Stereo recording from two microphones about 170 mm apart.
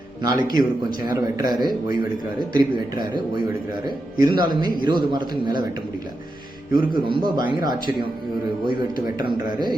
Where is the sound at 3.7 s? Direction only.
25° right (ahead or behind).